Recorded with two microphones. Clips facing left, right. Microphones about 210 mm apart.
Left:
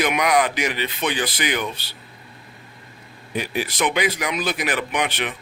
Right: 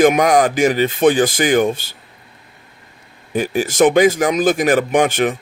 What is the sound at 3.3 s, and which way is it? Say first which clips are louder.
Speech: right 9 dB; 45° right (ahead or behind).